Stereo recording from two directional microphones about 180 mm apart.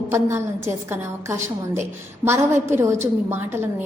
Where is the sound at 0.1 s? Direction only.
15° right (ahead or behind).